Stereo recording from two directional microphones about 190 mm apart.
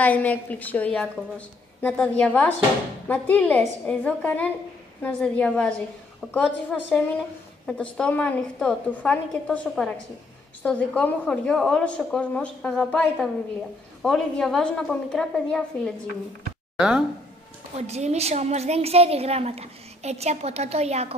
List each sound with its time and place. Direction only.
0.0 s a woman's voice: 10° left (ahead or behind)
17.7 s a woman's voice: 35° right (ahead or behind)